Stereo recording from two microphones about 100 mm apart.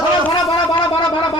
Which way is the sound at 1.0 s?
50° left (ahead or behind).